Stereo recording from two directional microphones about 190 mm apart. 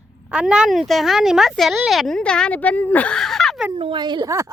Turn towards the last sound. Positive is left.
turn(degrees=-15)  # may be behind; listen again after turning